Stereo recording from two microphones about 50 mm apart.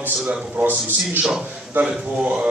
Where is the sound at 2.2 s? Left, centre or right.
Right.